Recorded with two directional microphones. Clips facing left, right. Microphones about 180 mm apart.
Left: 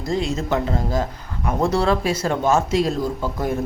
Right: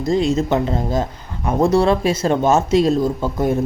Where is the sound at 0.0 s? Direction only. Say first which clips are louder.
Right 6 dB; 20° right (ahead or behind).